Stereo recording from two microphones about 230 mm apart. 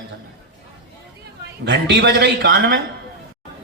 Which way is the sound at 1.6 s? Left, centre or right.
Right.